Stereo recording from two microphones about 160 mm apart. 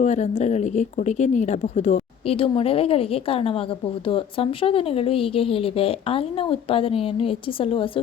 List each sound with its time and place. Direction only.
0.0 s a woman's voice: 45° left (ahead or behind)